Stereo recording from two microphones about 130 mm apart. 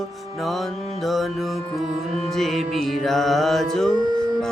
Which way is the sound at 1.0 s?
Centre (ahead or behind).